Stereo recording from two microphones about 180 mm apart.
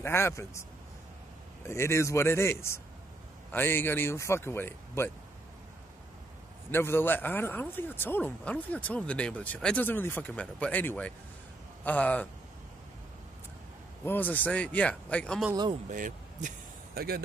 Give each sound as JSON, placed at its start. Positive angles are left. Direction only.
{"t": 0.0, "sound": "speech", "side_deg": 15}
{"t": 1.7, "sound": "speech", "side_deg": 15}
{"t": 6.7, "sound": "speech", "side_deg": 10}
{"t": 14.0, "sound": "speech", "side_deg": 10}
{"t": 15.9, "sound": "speech", "side_deg": -45}